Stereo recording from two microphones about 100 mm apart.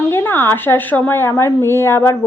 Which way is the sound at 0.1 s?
20° left (ahead or behind).